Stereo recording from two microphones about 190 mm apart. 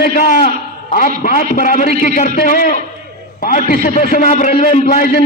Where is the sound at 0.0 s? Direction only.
50° left (ahead or behind).